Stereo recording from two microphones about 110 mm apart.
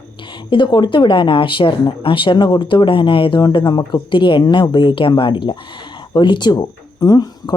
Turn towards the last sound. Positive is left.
turn(degrees=40)  # may be behind; listen again after turning